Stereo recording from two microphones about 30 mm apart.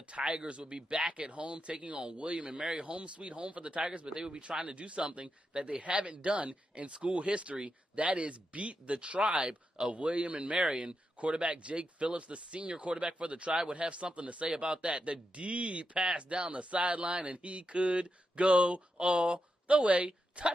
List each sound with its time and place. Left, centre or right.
0.1 s speech: right
4.0 s a man's voice: right
4.4 s speech: right
5.8 s speech: right
10.6 s speech: right
11.1 s speech: right